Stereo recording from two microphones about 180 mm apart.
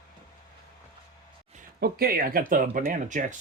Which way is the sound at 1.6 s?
55° right (ahead or behind).